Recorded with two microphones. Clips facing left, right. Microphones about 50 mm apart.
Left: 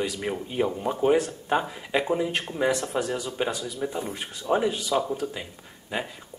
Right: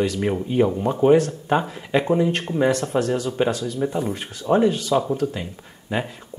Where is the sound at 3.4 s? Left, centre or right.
Centre.